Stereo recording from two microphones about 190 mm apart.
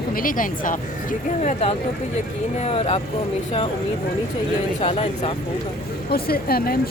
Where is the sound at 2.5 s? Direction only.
35° left (ahead or behind).